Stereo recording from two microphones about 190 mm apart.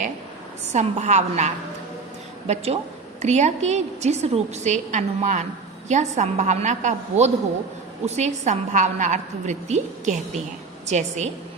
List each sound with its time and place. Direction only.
0.7 s a woman's voice: 35° right (ahead or behind)
3.2 s a woman's voice: 35° right (ahead or behind)